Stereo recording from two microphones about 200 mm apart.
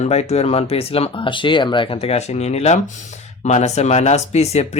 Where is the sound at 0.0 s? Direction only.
35° left (ahead or behind).